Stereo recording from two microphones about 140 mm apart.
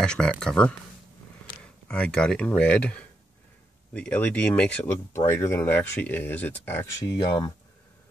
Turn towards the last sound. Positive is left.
turn(degrees=25)  # may be behind; listen again after turning